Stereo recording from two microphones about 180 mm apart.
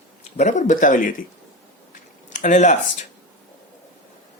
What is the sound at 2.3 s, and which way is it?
Speech, 45° left (ahead or behind).